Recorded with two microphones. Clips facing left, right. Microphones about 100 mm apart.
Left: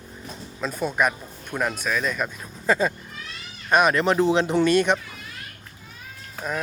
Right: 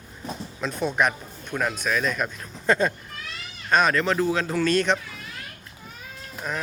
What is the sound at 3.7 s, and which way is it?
Speech, 15° left (ahead or behind).